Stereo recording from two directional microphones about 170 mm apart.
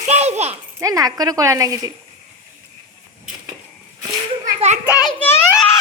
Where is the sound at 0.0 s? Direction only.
40° right (ahead or behind).